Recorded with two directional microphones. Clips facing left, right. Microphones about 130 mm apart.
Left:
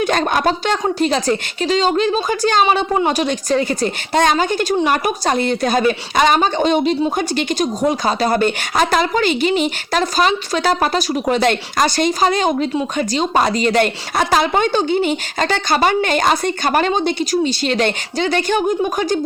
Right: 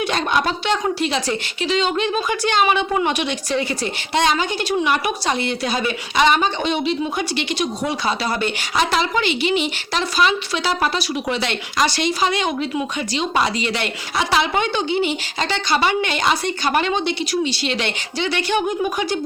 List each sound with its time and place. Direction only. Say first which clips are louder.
0.0 s speech: left 4 dB; 45° left (ahead or behind)